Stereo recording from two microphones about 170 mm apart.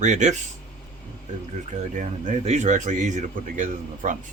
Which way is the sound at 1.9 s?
45° right (ahead or behind).